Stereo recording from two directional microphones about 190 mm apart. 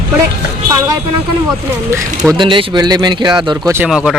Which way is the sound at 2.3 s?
25° right (ahead or behind).